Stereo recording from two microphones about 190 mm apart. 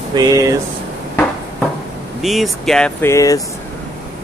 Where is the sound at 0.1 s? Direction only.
20° right (ahead or behind).